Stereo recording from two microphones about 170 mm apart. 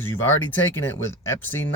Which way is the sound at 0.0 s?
15° left (ahead or behind).